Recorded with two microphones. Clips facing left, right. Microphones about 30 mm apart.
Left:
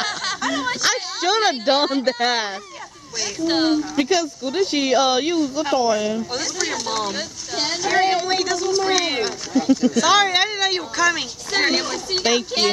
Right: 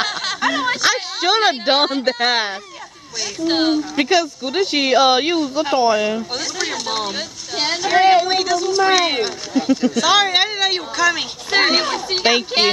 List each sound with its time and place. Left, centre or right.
0.0 s snicker: centre
0.4 s a sound: right
3.3 s speech: centre
3.9 s speech: right
6.3 s a sound: centre
8.8 s speech: centre